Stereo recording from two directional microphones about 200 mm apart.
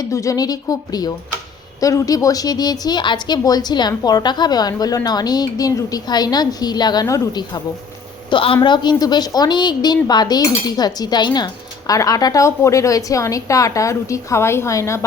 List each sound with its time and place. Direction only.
0.0 s a woman's voice: 15° left (ahead or behind)